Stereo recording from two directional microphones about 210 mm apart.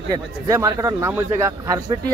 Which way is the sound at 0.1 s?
15° right (ahead or behind).